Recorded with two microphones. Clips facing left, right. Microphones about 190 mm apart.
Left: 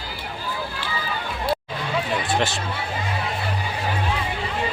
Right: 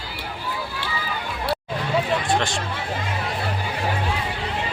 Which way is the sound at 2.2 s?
5° left (ahead or behind).